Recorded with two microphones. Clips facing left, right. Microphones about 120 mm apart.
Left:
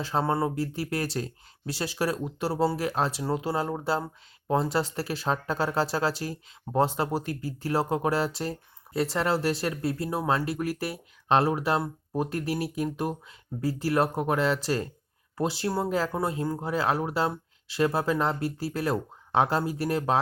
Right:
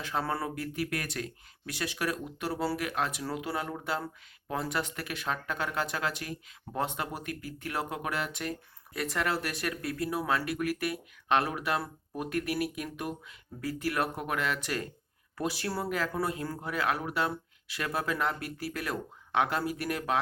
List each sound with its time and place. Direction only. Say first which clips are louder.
0.0 s speech: left 6 dB; 30° left (ahead or behind)